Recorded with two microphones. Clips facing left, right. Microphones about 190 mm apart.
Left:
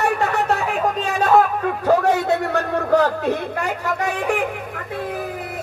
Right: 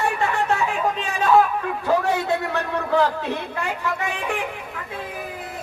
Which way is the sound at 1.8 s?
45° left (ahead or behind).